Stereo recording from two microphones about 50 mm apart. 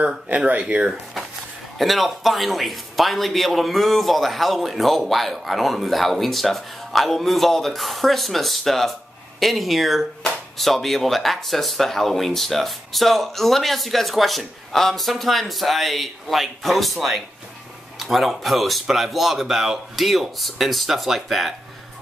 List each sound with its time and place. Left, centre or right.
0.5 s speech: right
1.8 s a man's voice: centre